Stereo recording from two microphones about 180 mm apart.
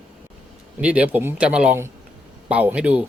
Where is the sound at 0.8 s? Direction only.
5° right (ahead or behind).